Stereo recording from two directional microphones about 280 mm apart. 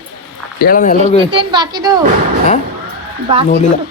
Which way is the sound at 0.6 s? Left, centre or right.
Left.